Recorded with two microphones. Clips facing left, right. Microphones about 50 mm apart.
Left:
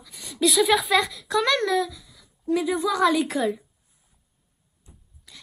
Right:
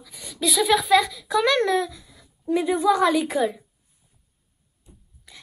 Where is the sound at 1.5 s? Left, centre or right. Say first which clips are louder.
Right 2 dB; right.